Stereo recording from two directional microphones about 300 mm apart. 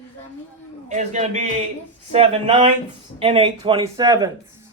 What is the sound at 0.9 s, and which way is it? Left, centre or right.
A man's voice, right.